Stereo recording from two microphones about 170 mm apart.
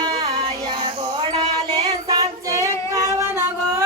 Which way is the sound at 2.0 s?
20° right (ahead or behind).